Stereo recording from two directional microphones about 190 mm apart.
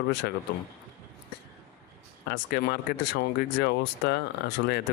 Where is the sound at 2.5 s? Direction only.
60° left (ahead or behind).